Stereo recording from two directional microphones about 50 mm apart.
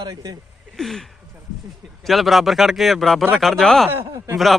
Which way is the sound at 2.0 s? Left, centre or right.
Centre.